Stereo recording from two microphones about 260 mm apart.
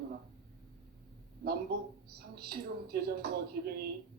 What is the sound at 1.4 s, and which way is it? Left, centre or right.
Speech, right.